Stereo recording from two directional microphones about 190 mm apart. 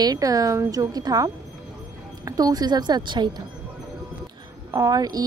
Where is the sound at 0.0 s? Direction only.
20° right (ahead or behind).